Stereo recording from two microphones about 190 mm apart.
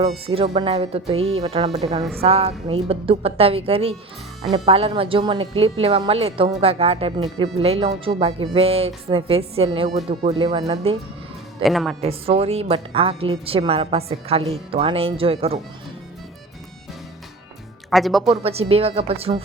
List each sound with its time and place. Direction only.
0.0 s a woman's voice: 30° right (ahead or behind)
11.6 s speech: centre (ahead or behind)
11.9 s a woman's voice: 30° right (ahead or behind)
17.9 s speech: centre (ahead or behind)
18.3 s a woman's voice: 35° right (ahead or behind)